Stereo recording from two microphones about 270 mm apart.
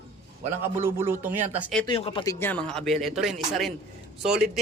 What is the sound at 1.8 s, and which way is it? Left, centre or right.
Speech, centre.